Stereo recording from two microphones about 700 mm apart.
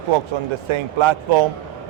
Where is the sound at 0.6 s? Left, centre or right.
Right.